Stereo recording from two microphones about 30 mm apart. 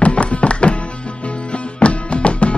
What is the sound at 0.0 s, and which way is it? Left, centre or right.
Music, left.